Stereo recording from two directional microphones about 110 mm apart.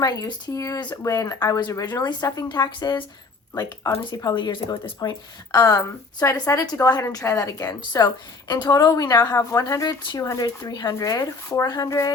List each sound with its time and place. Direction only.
0.0 s a woman's voice: 35° left (ahead or behind)
3.5 s a woman's voice: 30° left (ahead or behind)